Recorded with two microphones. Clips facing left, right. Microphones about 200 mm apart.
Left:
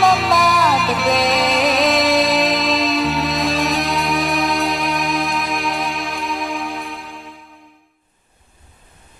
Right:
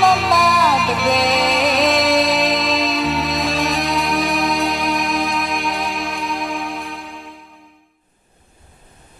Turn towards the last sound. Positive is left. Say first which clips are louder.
# right 1 dB
turn(degrees=0)  # may be behind; listen again after turning